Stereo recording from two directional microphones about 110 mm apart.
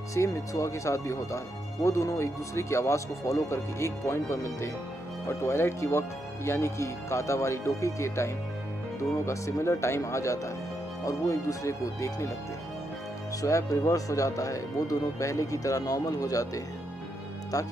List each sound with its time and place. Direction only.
0.1 s speech: 30° left (ahead or behind)
13.4 s speech: 30° left (ahead or behind)